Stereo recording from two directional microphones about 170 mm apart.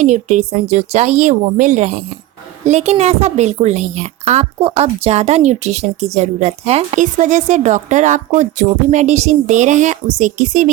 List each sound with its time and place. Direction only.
0.0 s a woman's voice: 40° right (ahead or behind)